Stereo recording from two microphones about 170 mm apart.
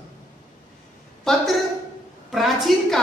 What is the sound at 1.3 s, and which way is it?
A woman's voice, 5° left (ahead or behind).